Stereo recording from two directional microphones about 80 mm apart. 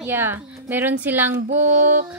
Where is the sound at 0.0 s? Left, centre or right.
Right.